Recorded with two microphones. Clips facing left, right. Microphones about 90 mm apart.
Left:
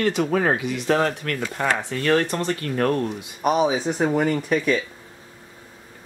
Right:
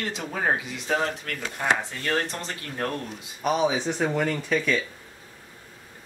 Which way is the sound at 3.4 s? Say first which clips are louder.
Left 4 dB; 10° left (ahead or behind).